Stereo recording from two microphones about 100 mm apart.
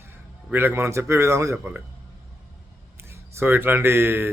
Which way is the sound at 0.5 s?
25° right (ahead or behind).